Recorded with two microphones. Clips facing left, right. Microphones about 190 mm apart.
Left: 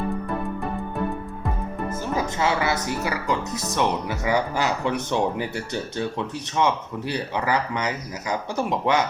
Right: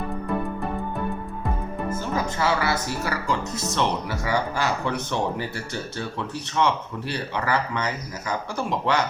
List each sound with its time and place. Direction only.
2.4 s speech: 20° left (ahead or behind)